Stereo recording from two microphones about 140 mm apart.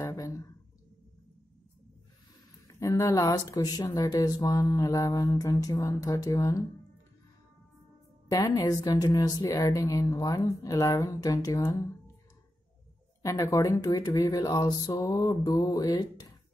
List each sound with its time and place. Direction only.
0.0 s a sound: 25° left (ahead or behind)
2.7 s speech: 25° left (ahead or behind)
8.3 s speech: 25° left (ahead or behind)
13.2 s speech: 25° left (ahead or behind)